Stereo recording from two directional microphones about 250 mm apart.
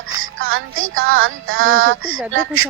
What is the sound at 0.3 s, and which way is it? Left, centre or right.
Speech, right.